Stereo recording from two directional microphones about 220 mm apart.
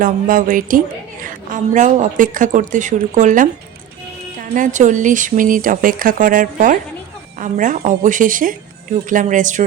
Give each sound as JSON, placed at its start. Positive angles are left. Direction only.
{"t": 0.0, "sound": "a woman's voice", "side_deg": -40}
{"t": 4.5, "sound": "a woman's voice", "side_deg": -35}